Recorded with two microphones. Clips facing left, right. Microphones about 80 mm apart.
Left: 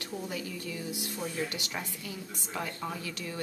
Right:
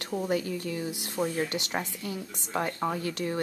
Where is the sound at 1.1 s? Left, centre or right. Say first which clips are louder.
Right 8 dB; right.